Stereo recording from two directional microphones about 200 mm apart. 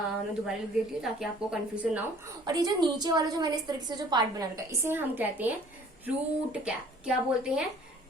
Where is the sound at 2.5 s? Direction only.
20° right (ahead or behind).